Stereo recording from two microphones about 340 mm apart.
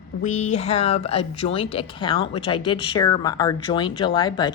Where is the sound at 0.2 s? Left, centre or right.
Centre.